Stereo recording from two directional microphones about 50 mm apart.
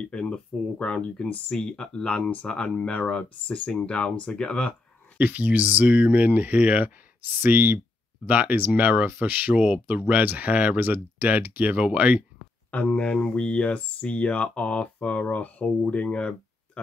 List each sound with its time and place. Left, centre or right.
0.0 s speech: left
5.2 s speech: right
12.7 s speech: left